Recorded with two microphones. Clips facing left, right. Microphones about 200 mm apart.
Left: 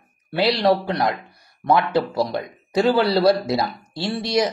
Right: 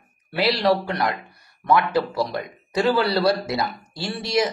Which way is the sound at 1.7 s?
25° left (ahead or behind).